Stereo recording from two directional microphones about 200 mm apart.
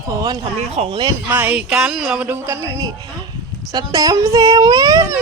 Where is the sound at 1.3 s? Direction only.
10° right (ahead or behind).